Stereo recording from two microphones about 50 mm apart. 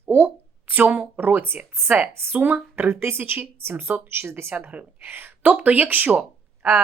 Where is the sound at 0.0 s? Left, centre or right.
Right.